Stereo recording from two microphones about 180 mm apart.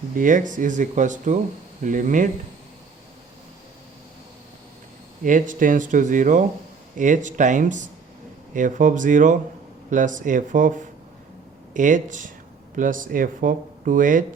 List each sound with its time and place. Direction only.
0.1 s speech: 45° right (ahead or behind)
5.2 s speech: 45° right (ahead or behind)